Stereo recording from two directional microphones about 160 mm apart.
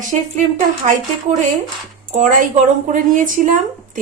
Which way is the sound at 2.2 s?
50° right (ahead or behind).